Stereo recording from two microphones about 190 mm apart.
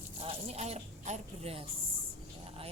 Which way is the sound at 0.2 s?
30° right (ahead or behind).